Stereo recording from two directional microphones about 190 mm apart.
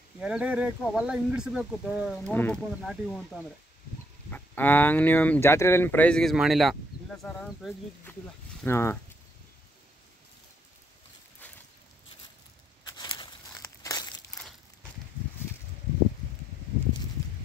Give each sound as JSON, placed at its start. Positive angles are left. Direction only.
{"t": 0.2, "sound": "speech", "side_deg": -5}
{"t": 2.1, "sound": "speech", "side_deg": 10}
{"t": 12.8, "sound": "crumpling", "side_deg": 20}